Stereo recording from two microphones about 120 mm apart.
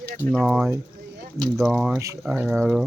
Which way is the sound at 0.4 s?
10° right (ahead or behind).